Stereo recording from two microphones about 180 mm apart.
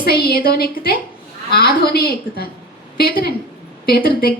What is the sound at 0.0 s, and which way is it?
A woman's voice, 60° left (ahead or behind).